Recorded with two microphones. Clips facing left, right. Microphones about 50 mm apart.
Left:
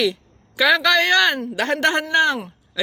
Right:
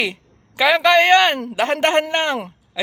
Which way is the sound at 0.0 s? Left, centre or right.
Right.